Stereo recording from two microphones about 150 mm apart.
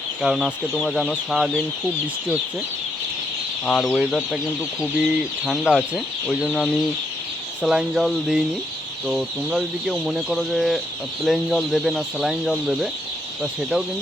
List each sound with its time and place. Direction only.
0.2 s speech: centre (ahead or behind)
3.7 s speech: centre (ahead or behind)
7.6 s speech: 5° right (ahead or behind)